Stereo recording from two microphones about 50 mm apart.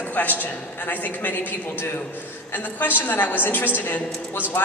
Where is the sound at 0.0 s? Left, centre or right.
Left.